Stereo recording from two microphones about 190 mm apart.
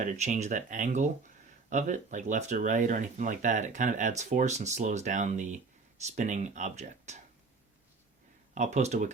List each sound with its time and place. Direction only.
0.0 s speech: 40° right (ahead or behind)
8.5 s speech: 40° right (ahead or behind)